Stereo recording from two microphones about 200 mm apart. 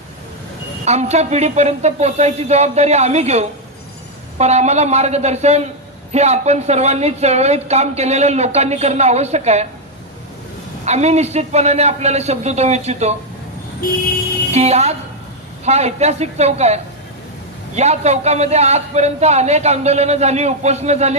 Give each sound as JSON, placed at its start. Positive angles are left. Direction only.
{"t": 0.9, "sound": "speech", "side_deg": -35}
{"t": 10.8, "sound": "speech", "side_deg": -35}
{"t": 14.5, "sound": "a woman's voice", "side_deg": -30}